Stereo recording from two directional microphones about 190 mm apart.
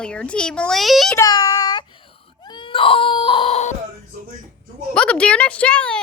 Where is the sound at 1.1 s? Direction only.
20° left (ahead or behind).